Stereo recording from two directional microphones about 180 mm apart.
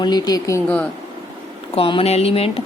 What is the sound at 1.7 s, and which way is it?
Speech, 30° left (ahead or behind).